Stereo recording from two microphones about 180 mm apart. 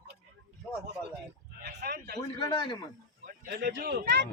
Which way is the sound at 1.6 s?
65° right (ahead or behind).